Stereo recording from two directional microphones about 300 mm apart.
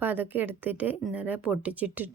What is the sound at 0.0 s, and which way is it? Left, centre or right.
A woman's voice, centre.